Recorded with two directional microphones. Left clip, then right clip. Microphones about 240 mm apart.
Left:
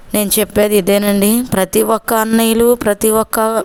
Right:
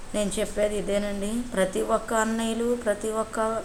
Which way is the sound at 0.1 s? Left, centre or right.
Left.